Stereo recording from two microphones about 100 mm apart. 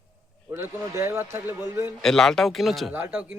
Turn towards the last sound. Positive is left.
turn(degrees=-20)  # may be behind; listen again after turning